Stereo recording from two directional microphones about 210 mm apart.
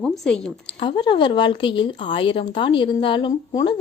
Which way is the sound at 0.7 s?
25° left (ahead or behind).